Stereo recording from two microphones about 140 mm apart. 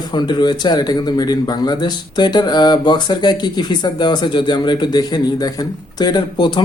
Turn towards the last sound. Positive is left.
turn(degrees=30)  # may be behind; listen again after turning